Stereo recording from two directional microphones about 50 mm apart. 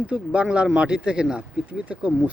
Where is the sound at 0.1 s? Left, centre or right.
Right.